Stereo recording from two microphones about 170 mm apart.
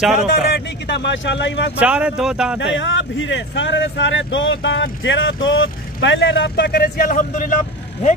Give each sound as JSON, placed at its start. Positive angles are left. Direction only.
{"t": 0.3, "sound": "speech", "side_deg": 80}
{"t": 1.8, "sound": "speech", "side_deg": -5}
{"t": 2.6, "sound": "speech", "side_deg": 90}